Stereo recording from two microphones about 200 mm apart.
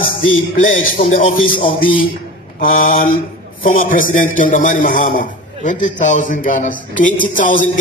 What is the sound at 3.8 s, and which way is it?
A man's voice, 45° left (ahead or behind).